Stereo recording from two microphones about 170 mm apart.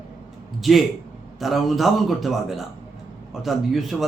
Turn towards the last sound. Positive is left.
turn(degrees=0)  # may be behind; listen again after turning